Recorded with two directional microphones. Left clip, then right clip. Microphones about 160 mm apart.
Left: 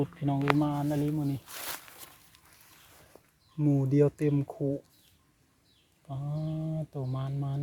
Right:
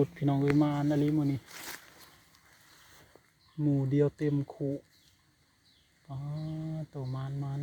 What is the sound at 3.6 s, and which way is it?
Speech, 15° left (ahead or behind).